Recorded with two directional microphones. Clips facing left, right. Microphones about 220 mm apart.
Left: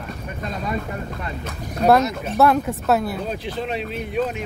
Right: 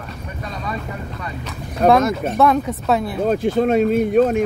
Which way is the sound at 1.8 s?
50° right (ahead or behind).